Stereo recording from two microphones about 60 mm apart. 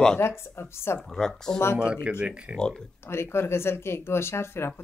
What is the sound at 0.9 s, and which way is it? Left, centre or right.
Speech, centre.